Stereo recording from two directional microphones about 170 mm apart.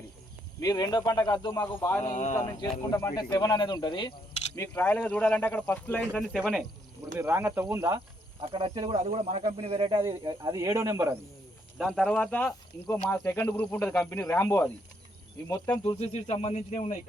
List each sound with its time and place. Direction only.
0.6 s speech: 25° left (ahead or behind)
2.0 s speech: 45° left (ahead or behind)
2.9 s speech: 20° left (ahead or behind)
4.5 s speech: 15° left (ahead or behind)
7.2 s speech: 15° right (ahead or behind)
11.8 s speech: centre (ahead or behind); by 17.0 s 45° left (ahead or behind)